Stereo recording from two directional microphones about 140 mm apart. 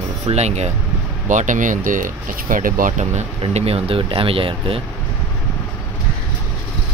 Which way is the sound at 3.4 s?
45° right (ahead or behind).